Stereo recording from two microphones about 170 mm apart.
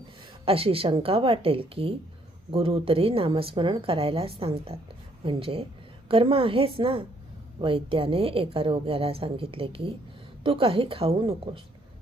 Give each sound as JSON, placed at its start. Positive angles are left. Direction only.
{"t": 0.4, "sound": "a woman's voice", "side_deg": -35}